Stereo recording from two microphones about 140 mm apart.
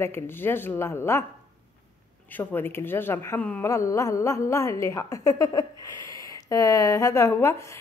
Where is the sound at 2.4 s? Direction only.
15° left (ahead or behind).